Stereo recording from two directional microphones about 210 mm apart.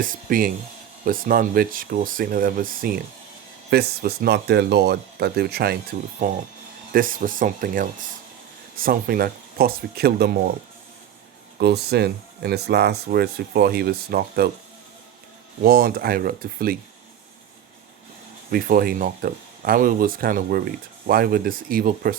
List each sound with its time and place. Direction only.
0.0 s speech: 40° right (ahead or behind)
11.6 s speech: 50° right (ahead or behind)
15.6 s speech: 45° right (ahead or behind)
18.5 s speech: 45° right (ahead or behind)